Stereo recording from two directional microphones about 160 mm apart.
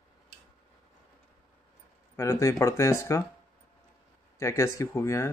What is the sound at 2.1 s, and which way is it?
Speech, 15° left (ahead or behind).